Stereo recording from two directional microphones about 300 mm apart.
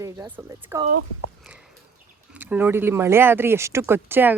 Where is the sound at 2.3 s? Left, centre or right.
Centre.